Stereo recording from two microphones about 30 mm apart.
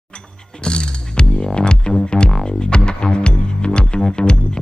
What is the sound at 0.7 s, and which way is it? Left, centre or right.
Music, left.